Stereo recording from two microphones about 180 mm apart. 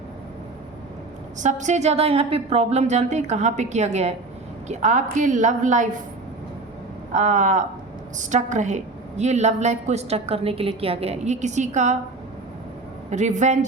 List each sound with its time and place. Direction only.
1.4 s a woman's voice: 40° right (ahead or behind)
7.1 s a woman's voice: 45° right (ahead or behind)
13.1 s a woman's voice: 40° right (ahead or behind)